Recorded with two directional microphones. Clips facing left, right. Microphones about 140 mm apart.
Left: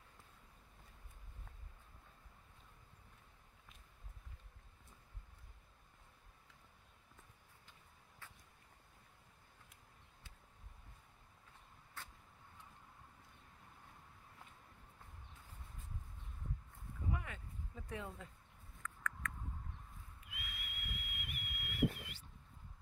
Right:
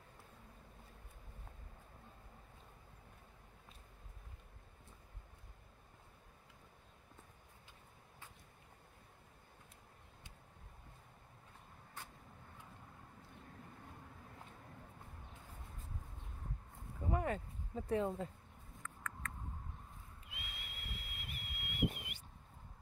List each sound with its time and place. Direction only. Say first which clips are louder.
17.1 s a sound: right 10 dB; 40° right (ahead or behind)
18.8 s rodents: left 3 dB; 30° right (ahead or behind)
20.2 s whistle: left 1 dB; 25° right (ahead or behind)